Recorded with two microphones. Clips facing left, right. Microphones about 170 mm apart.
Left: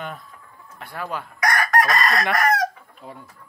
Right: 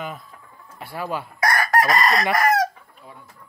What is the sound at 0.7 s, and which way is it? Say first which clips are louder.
Speech: right 2 dB; 5° right (ahead or behind).